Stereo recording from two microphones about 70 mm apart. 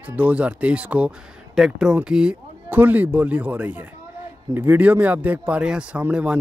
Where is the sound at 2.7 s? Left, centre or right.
Right.